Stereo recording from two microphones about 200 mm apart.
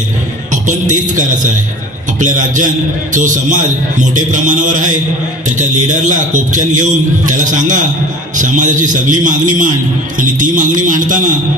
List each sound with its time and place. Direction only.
0.5 s a man's voice: 40° right (ahead or behind)